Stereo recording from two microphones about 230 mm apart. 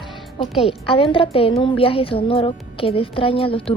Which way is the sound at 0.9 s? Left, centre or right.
Left.